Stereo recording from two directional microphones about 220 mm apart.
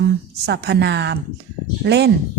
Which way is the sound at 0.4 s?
50° right (ahead or behind).